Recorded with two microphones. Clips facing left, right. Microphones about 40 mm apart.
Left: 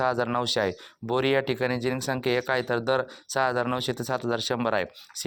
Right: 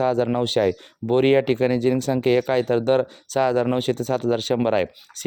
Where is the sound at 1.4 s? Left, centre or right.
Right.